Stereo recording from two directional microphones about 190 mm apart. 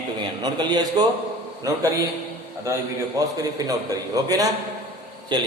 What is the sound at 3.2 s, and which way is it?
A man's voice, 20° right (ahead or behind).